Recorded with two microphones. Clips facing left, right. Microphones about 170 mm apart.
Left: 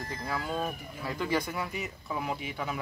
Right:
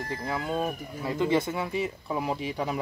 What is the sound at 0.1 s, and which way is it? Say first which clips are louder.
Speech: right 3 dB; 25° right (ahead or behind).